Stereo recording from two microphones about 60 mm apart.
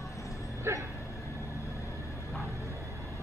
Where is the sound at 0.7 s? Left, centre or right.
Right.